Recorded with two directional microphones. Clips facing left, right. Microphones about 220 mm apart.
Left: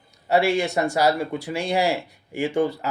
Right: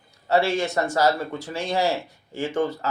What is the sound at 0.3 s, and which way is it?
Speech, 15° left (ahead or behind).